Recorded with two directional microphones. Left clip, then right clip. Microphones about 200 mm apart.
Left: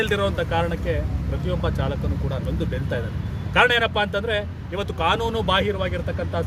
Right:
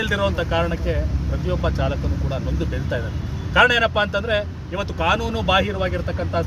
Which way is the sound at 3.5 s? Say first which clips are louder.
Right 2 dB; 15° left (ahead or behind).